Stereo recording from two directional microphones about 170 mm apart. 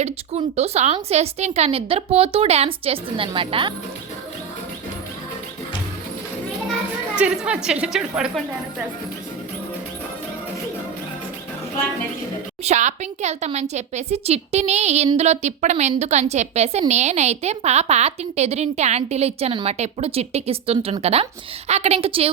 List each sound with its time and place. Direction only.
0.0 s a woman's voice: 40° right (ahead or behind)
7.2 s a woman's voice: 5° right (ahead or behind)
12.6 s a woman's voice: 45° right (ahead or behind)